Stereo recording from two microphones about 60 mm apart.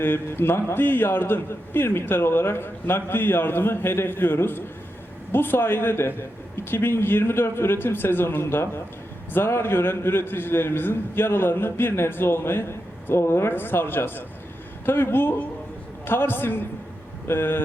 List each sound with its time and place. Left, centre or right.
0.0 s a man's voice: left